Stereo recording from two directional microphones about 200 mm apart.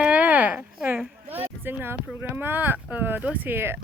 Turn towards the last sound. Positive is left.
turn(degrees=-10)  # may be behind; listen again after turning